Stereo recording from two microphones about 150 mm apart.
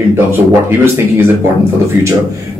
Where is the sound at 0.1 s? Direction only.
15° right (ahead or behind).